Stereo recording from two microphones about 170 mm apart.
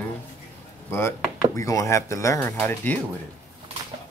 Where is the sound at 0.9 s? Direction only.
15° left (ahead or behind).